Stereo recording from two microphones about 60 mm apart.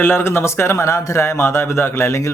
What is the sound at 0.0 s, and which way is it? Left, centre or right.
Speech, left.